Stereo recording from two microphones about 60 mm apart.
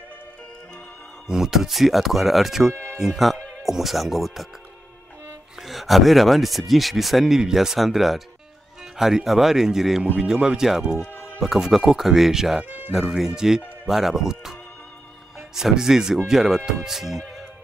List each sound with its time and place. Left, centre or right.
1.2 s speech: centre
5.6 s speech: centre
12.6 s music: right
13.1 s speech: centre